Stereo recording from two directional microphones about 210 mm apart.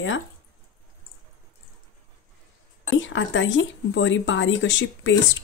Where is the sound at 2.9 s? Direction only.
65° left (ahead or behind).